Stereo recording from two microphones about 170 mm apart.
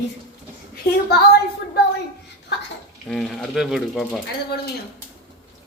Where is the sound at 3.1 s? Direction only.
Centre (ahead or behind).